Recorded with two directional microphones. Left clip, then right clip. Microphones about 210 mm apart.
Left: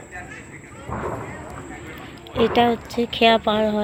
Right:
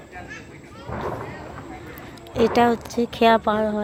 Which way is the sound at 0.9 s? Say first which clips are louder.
Left 1 dB; 50° left (ahead or behind).